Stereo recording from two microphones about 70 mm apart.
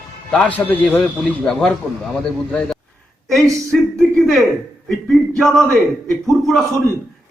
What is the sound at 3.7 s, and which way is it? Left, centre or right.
Speech, centre.